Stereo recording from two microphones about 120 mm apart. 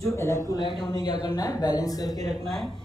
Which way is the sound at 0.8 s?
40° left (ahead or behind).